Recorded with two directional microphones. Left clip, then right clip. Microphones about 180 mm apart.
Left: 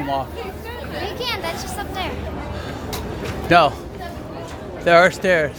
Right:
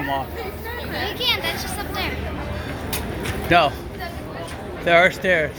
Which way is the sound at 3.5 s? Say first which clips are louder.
Left 3 dB; 30° left (ahead or behind).